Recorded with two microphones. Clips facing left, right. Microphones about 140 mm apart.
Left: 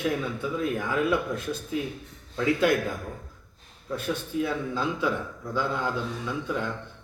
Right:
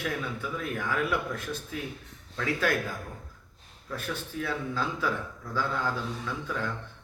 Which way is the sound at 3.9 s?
20° left (ahead or behind).